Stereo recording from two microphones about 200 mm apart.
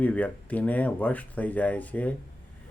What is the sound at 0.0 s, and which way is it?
Speech, 5° left (ahead or behind).